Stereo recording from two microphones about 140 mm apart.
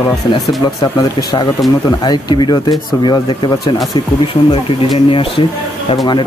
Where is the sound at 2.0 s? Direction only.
30° left (ahead or behind).